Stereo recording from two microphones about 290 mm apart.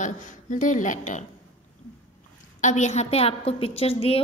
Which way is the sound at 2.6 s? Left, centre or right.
Left.